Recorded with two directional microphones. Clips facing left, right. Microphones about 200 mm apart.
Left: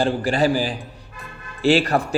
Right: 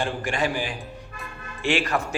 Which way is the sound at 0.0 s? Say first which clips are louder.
Left 7 dB; 35° left (ahead or behind).